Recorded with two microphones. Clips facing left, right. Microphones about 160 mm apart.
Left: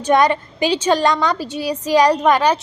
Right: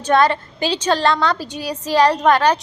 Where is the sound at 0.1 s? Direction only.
10° left (ahead or behind).